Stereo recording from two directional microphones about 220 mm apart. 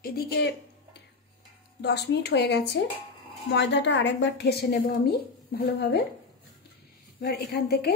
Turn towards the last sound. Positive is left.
turn(degrees=50)  # may be behind; listen again after turning